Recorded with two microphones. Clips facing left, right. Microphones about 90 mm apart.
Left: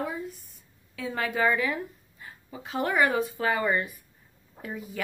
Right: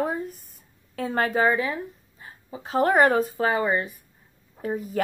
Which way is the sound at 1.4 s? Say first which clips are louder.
Right 3 dB; 30° right (ahead or behind).